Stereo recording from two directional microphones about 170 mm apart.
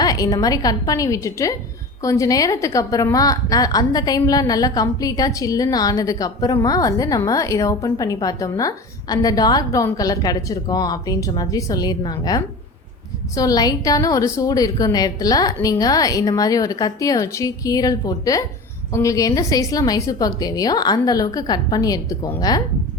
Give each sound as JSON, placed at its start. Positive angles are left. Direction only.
{"t": 0.0, "sound": "a woman's voice", "side_deg": 20}